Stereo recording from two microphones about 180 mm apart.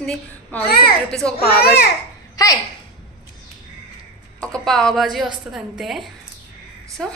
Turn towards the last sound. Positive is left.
turn(degrees=5)  # may be behind; listen again after turning